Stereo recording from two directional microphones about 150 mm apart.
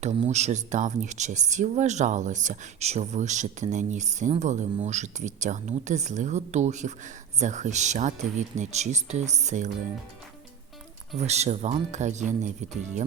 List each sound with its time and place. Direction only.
0.0 s speech: 45° right (ahead or behind)
11.3 s speech: 45° right (ahead or behind)